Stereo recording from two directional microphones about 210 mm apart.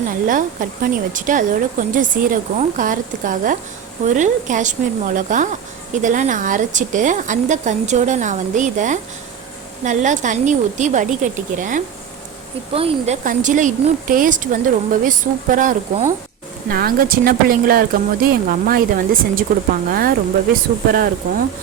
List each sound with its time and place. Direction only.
0.3 s speech: 40° right (ahead or behind)
13.2 s speech: 35° right (ahead or behind)